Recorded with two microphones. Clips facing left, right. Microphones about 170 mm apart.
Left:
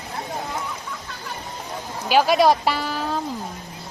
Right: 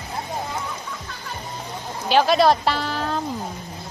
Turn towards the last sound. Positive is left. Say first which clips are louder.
# even
turn(degrees=5)  # may be behind; listen again after turning